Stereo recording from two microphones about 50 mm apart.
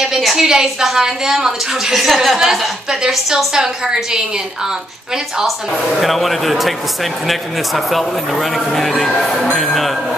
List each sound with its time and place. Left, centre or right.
0.0 s a woman's voice: centre